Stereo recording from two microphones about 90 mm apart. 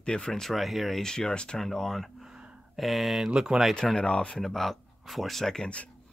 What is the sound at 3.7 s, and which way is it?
Speech, 10° left (ahead or behind).